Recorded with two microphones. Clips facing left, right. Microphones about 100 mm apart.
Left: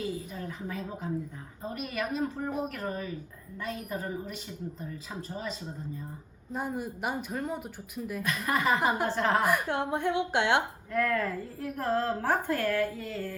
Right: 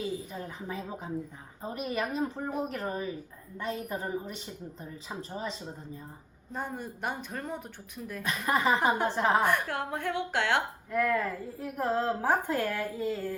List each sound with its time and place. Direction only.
0.3 s a woman's voice: 25° right (ahead or behind)
6.5 s speech: 10° left (ahead or behind)
8.2 s a woman's voice: 20° right (ahead or behind)
9.4 s a woman's voice: 5° left (ahead or behind)
9.6 s a woman's voice: 20° left (ahead or behind)
10.9 s a woman's voice: 10° right (ahead or behind)